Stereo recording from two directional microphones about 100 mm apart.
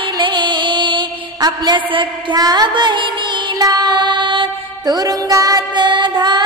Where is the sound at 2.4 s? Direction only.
40° right (ahead or behind).